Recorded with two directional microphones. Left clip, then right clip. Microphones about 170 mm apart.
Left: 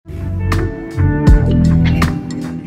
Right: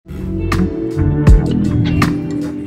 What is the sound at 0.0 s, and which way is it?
Music, centre (ahead or behind).